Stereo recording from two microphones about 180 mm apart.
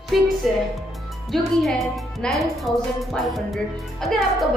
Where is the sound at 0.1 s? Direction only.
Centre (ahead or behind).